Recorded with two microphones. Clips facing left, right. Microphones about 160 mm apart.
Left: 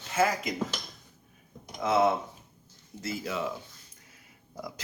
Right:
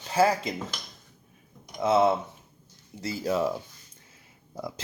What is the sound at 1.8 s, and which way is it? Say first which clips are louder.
Speech: right 3 dB; 25° right (ahead or behind).